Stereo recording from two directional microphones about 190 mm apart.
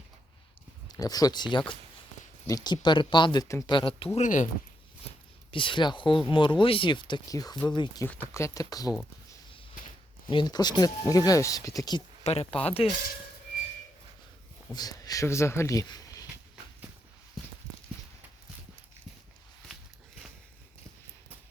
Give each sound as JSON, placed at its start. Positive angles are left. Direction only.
{"t": 0.9, "sound": "speech", "side_deg": 20}
{"t": 5.5, "sound": "speech", "side_deg": 25}
{"t": 10.2, "sound": "speech", "side_deg": 25}
{"t": 12.2, "sound": "speech", "side_deg": 35}
{"t": 14.7, "sound": "speech", "side_deg": 20}